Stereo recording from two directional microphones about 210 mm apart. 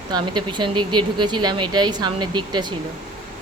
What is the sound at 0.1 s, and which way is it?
Speech, 20° right (ahead or behind).